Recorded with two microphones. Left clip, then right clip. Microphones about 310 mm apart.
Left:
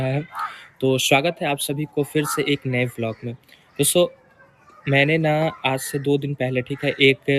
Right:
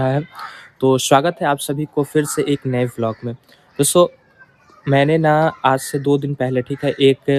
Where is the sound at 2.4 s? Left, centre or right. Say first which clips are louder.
Right 3 dB; right.